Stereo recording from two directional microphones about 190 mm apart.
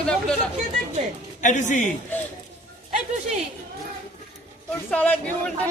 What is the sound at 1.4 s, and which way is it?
Speech, 40° left (ahead or behind).